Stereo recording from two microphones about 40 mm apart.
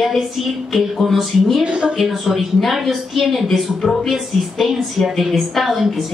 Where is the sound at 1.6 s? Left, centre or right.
Right.